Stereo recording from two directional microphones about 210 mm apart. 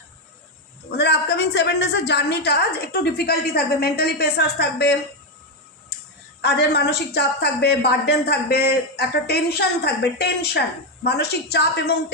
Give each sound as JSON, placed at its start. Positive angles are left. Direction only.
{"t": 0.9, "sound": "a woman's voice", "side_deg": 55}
{"t": 5.9, "sound": "a sound", "side_deg": 50}
{"t": 6.4, "sound": "a woman's voice", "side_deg": 50}